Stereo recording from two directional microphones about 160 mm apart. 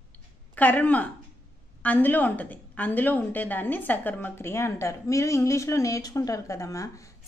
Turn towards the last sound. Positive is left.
turn(degrees=20)  # may be behind; listen again after turning